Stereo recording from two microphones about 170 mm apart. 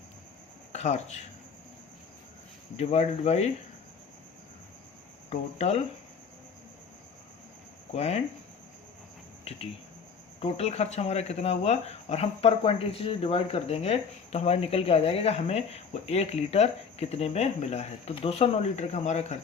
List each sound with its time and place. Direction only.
0.7 s speech: 40° left (ahead or behind)
2.7 s speech: 40° left (ahead or behind)
5.3 s speech: 40° left (ahead or behind)
7.9 s speech: 40° left (ahead or behind)
9.4 s cricket: 35° left (ahead or behind)
10.4 s speech: 40° left (ahead or behind)